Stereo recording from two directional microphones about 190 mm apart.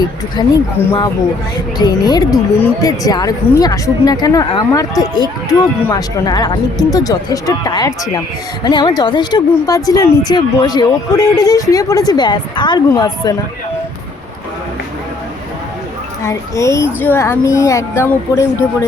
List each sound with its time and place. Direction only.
0.4 s speech: 20° left (ahead or behind)
1.8 s speech: 20° left (ahead or behind)
16.2 s speech: 15° left (ahead or behind)